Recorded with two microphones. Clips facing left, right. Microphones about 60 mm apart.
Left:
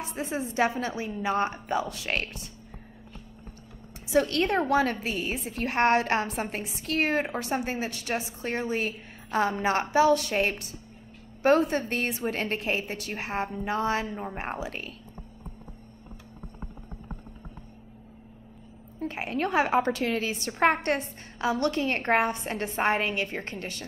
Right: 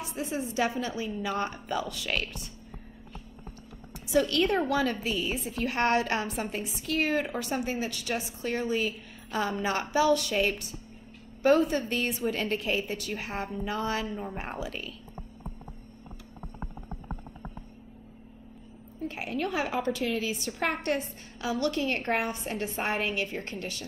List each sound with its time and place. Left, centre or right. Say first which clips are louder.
0.0 s a woman's voice: left 1 dB; left
4.1 s a woman's voice: left 1 dB; left
14.0 s speech: left 1 dB; left
14.3 s a woman's voice: left 2 dB; left
18.9 s a woman's voice: left 2 dB; left